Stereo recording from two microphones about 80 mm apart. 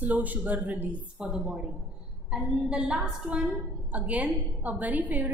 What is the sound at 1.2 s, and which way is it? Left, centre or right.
A woman's voice, centre.